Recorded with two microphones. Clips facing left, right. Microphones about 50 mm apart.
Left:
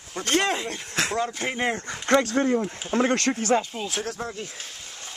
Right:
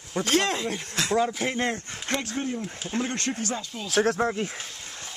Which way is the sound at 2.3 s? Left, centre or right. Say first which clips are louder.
Left 8 dB; left.